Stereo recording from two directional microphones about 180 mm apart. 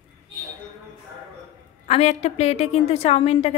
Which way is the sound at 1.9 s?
35° left (ahead or behind).